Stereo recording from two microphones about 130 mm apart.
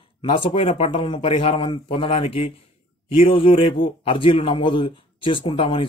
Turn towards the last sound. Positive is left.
turn(degrees=40)  # may be behind; listen again after turning